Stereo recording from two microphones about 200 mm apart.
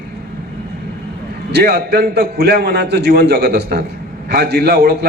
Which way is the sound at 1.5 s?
50° right (ahead or behind).